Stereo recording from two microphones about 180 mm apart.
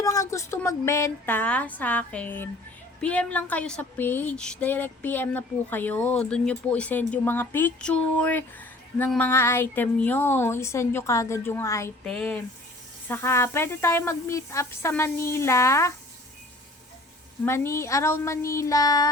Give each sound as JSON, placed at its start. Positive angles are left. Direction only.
{"t": 0.0, "sound": "speech", "side_deg": 20}
{"t": 17.4, "sound": "speech", "side_deg": 15}